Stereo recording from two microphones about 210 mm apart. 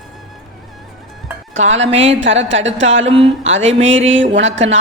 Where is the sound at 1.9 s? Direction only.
30° right (ahead or behind).